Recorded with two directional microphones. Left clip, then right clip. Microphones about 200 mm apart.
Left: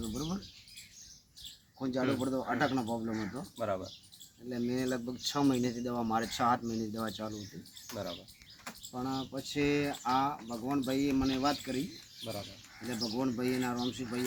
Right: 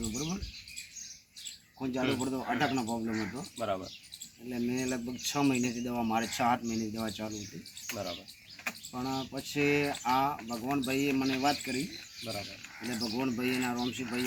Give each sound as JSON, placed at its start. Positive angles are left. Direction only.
{"t": 0.1, "sound": "rodents", "side_deg": 10}
{"t": 1.8, "sound": "speech", "side_deg": 15}
{"t": 2.2, "sound": "speech", "side_deg": 5}
{"t": 3.6, "sound": "speech", "side_deg": 20}
{"t": 4.4, "sound": "speech", "side_deg": 5}
{"t": 8.9, "sound": "speech", "side_deg": 5}
{"t": 12.9, "sound": "speech", "side_deg": 5}